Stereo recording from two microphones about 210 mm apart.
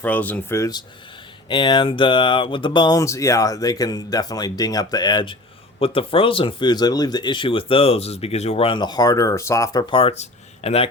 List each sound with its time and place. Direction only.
0.0 s speech: 10° left (ahead or behind); by 10.8 s 30° left (ahead or behind)